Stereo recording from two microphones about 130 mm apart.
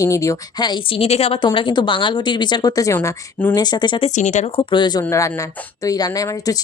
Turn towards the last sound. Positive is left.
turn(degrees=30)  # may be behind; listen again after turning